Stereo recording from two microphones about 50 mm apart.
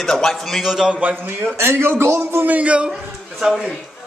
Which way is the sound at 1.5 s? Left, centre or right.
Right.